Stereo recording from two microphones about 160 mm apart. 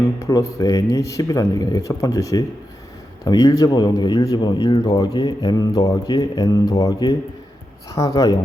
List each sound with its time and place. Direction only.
0.3 s speech: 20° left (ahead or behind)